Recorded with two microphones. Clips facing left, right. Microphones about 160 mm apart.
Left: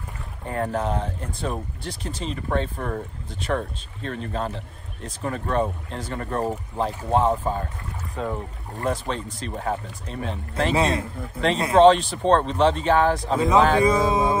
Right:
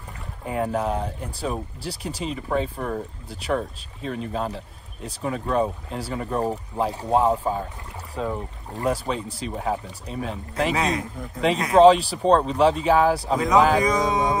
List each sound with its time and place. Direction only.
0.5 s speech: 5° right (ahead or behind)
8.7 s speech: 15° right (ahead or behind)
9.0 s speech: 5° right (ahead or behind)
10.7 s speech: 30° left (ahead or behind)
11.1 s speech: 5° left (ahead or behind)